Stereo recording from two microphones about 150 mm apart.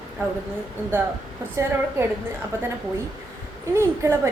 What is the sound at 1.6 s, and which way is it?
Speech, 20° right (ahead or behind).